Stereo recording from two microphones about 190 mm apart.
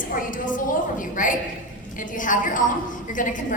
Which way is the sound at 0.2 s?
45° left (ahead or behind).